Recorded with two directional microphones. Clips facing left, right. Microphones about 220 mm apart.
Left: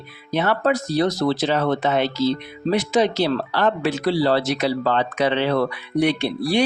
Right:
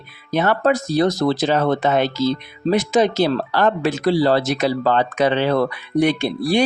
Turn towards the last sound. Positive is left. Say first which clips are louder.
# right 2 dB
turn(degrees=-45)  # may be behind; listen again after turning